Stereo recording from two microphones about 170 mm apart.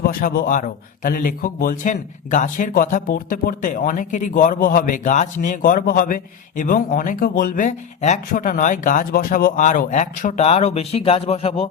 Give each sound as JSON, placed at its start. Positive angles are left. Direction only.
{"t": 0.0, "sound": "a man's voice", "side_deg": 60}